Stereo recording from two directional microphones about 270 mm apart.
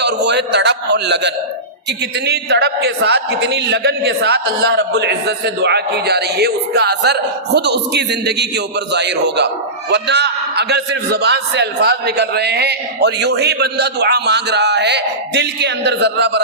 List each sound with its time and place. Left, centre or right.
0.0 s a man's voice: right